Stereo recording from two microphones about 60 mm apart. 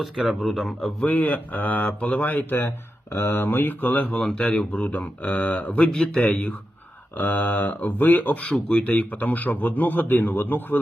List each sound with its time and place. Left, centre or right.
0.0 s speech: centre
1.0 s speech: left
4.2 s speech: centre; by 8.4 s left
8.4 s speech: centre; by 10.8 s left